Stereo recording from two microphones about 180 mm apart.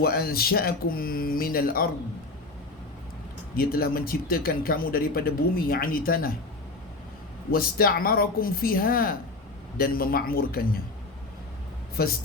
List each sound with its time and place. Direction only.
0.0 s speech: 60° left (ahead or behind)
3.5 s speech: 55° left (ahead or behind)
7.5 s speech: 55° left (ahead or behind)